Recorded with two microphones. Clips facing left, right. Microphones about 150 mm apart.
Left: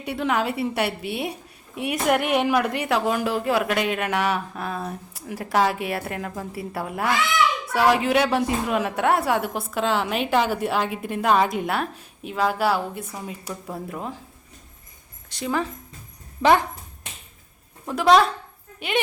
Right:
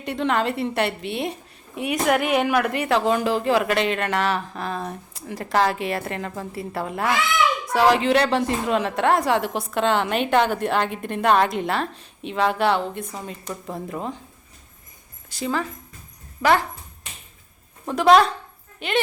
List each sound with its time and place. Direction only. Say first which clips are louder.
0.0 s a woman's voice: right 1 dB; 5° left (ahead or behind)
15.3 s speech: right 1 dB; centre (ahead or behind)
16.4 s speech: left 1 dB; 20° left (ahead or behind)
17.8 s a woman's voice: right 2 dB; centre (ahead or behind)